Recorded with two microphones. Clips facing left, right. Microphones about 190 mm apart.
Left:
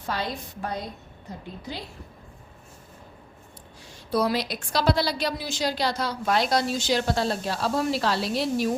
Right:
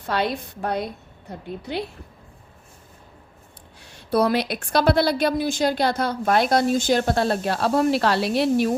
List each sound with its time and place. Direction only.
0.1 s a woman's voice: 65° right (ahead or behind)
3.8 s a woman's voice: 60° right (ahead or behind)